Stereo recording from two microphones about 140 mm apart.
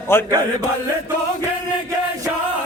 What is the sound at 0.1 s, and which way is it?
Chant, 15° left (ahead or behind).